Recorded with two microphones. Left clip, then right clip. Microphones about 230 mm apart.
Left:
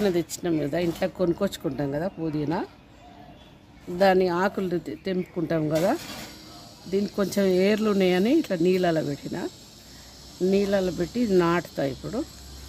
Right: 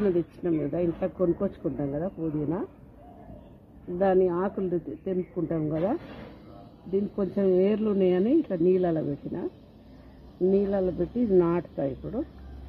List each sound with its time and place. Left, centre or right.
0.0 s speech: left
4.0 s speech: left
7.2 s speech: left
10.5 s speech: left